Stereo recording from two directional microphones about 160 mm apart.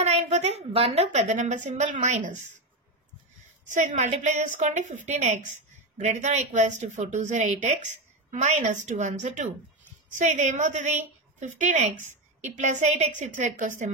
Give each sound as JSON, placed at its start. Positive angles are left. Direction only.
{"t": 0.0, "sound": "a woman's voice", "side_deg": -45}
{"t": 3.6, "sound": "a woman's voice", "side_deg": -50}